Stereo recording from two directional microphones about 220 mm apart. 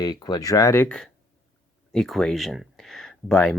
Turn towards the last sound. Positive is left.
turn(degrees=5)  # may be behind; listen again after turning